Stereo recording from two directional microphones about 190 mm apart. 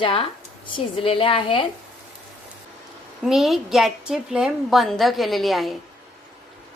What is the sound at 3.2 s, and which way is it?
A woman's voice, centre (ahead or behind).